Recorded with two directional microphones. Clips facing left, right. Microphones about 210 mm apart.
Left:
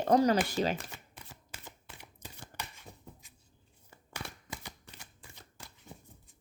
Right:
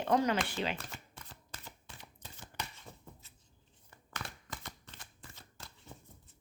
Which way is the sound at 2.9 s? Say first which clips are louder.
Left 1 dB; 15° left (ahead or behind).